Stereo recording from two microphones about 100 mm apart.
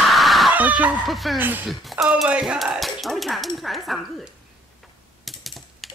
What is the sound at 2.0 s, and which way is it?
Speech, 5° right (ahead or behind).